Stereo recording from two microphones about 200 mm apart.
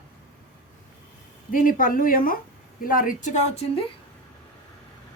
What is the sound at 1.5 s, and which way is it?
A woman's voice, 45° left (ahead or behind).